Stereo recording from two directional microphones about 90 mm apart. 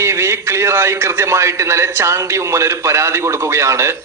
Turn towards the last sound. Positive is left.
turn(degrees=-30)  # may be behind; listen again after turning